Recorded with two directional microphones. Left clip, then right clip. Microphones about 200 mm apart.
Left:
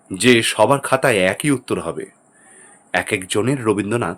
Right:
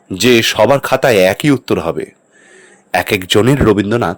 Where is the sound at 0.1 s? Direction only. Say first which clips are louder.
Right 4 dB; 35° right (ahead or behind).